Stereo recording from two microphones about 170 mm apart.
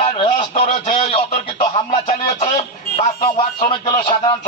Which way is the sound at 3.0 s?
35° left (ahead or behind).